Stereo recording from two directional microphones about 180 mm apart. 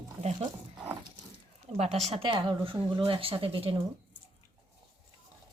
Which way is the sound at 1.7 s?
35° right (ahead or behind).